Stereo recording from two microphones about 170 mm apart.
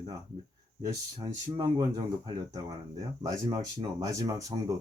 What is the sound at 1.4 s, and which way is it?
Speech, 25° right (ahead or behind).